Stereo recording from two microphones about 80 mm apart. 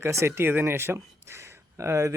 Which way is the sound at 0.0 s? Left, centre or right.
Right.